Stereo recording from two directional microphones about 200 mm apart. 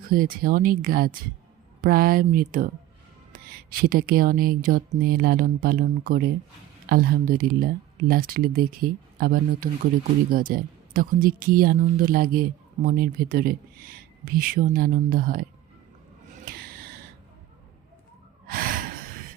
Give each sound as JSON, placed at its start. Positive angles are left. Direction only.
{"t": 0.1, "sound": "speech", "side_deg": -45}
{"t": 18.4, "sound": "gasp", "side_deg": -45}